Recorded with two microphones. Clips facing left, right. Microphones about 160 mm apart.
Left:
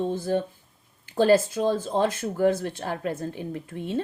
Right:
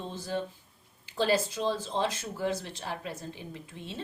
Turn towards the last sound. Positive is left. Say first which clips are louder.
# left 12 dB
turn(degrees=55)  # may be behind; listen again after turning